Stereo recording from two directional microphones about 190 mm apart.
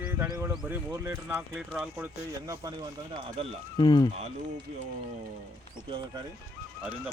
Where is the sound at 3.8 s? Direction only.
25° left (ahead or behind).